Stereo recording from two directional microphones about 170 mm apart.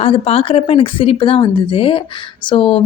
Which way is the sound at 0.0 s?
35° left (ahead or behind).